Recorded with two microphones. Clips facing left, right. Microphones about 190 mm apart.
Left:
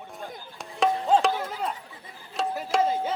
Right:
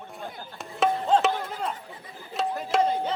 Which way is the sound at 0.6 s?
Centre (ahead or behind).